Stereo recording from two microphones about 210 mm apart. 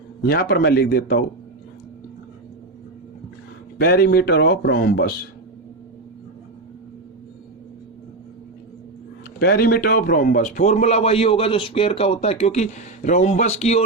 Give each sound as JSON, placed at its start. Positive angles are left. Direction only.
{"t": 0.2, "sound": "speech", "side_deg": 45}
{"t": 3.8, "sound": "speech", "side_deg": 50}
{"t": 9.4, "sound": "a man's voice", "side_deg": 45}